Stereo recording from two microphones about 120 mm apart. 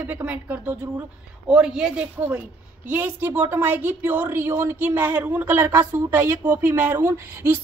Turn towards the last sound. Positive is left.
turn(degrees=-15)  # may be behind; listen again after turning